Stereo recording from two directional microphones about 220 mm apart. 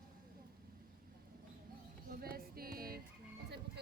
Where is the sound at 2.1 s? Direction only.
40° right (ahead or behind).